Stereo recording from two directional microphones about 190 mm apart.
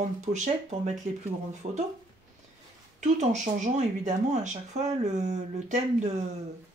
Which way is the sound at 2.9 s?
40° right (ahead or behind).